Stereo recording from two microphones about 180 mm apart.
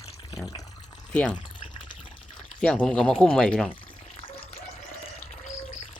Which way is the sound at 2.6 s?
5° left (ahead or behind).